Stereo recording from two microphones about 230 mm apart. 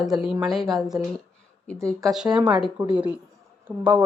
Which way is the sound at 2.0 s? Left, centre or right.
Centre.